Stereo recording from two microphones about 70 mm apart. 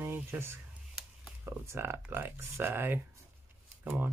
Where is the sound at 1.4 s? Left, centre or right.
Right.